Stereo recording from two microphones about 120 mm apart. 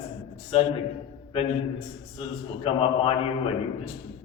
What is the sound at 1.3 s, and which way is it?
A man's voice, 55° left (ahead or behind).